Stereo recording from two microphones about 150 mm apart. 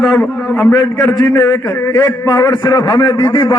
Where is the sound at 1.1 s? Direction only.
25° left (ahead or behind).